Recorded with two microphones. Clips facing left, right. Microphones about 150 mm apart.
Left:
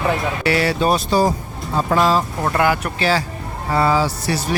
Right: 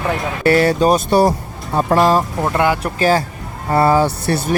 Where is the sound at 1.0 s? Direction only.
60° right (ahead or behind).